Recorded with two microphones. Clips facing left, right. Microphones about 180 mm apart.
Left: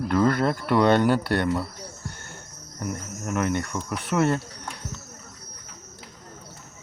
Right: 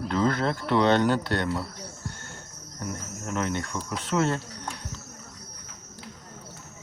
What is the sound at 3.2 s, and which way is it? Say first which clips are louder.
Speech: left 4 dB; 10° left (ahead or behind).